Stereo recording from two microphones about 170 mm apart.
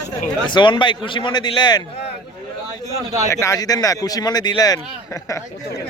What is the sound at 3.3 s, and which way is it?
Speech, 20° left (ahead or behind).